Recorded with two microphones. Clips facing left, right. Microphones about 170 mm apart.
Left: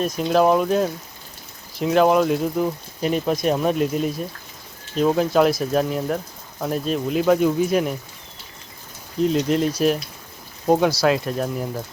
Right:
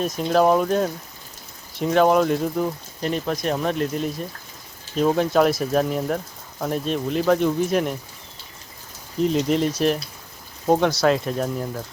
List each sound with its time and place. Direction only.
0.0 s speech: centre (ahead or behind)
9.1 s speech: centre (ahead or behind)